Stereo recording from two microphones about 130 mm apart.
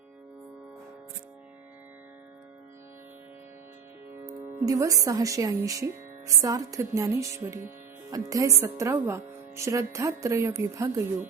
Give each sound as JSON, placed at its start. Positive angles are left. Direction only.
{"t": 4.6, "sound": "speech", "side_deg": -25}